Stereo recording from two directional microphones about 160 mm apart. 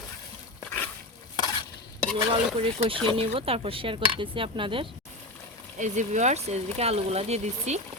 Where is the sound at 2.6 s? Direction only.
35° right (ahead or behind).